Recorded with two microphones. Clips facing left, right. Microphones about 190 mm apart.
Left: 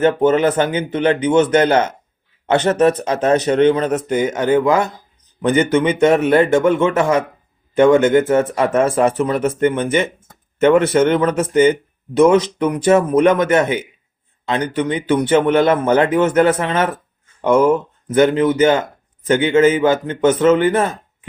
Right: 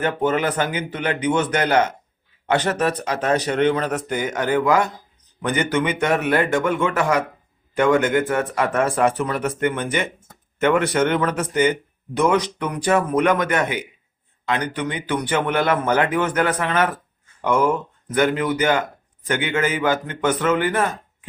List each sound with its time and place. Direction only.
0.0 s speech: 25° left (ahead or behind)